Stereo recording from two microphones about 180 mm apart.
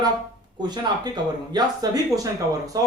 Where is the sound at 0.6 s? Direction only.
25° right (ahead or behind).